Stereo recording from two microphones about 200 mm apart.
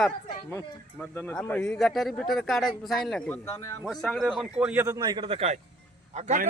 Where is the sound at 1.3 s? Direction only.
5° left (ahead or behind); by 6.5 s 40° right (ahead or behind).